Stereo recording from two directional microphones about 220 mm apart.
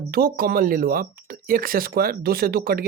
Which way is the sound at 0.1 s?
40° right (ahead or behind).